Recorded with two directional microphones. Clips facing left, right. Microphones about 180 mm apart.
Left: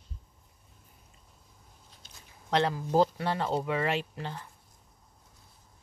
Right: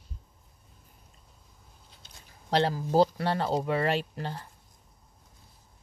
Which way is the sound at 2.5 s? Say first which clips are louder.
Right 1 dB; 35° right (ahead or behind).